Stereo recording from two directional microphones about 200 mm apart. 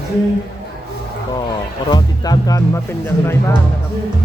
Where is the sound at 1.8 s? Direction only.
20° left (ahead or behind).